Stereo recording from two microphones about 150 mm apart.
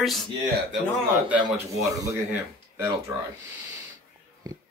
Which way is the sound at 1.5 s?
20° right (ahead or behind).